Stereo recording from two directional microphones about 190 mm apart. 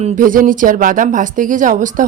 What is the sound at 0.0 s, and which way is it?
Speech, 40° right (ahead or behind).